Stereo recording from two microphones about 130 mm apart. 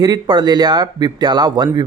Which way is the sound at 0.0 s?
30° right (ahead or behind).